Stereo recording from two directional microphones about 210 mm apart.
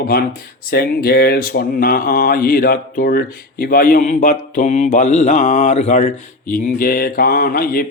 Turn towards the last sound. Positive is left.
turn(degrees=45)  # may be behind; listen again after turning